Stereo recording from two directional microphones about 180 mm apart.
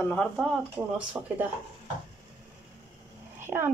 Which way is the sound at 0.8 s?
10° right (ahead or behind).